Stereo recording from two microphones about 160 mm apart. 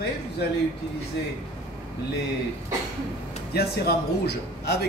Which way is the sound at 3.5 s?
85° left.